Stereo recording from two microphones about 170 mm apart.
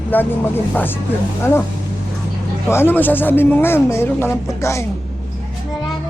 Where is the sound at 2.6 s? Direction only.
15° left (ahead or behind).